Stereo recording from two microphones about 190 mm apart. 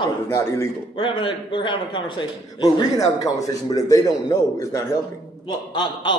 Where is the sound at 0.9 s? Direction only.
25° left (ahead or behind).